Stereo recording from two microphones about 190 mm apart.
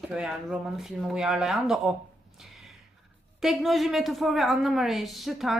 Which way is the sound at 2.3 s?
Centre (ahead or behind).